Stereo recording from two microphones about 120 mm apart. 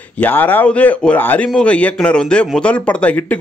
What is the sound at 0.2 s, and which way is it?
A man's voice, 15° left (ahead or behind).